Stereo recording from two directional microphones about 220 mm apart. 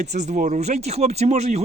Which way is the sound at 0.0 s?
30° right (ahead or behind).